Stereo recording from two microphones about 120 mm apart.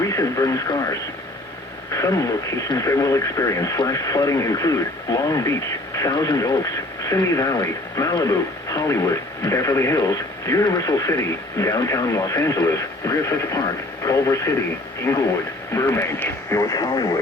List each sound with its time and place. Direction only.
0.0 s speech: 25° left (ahead or behind)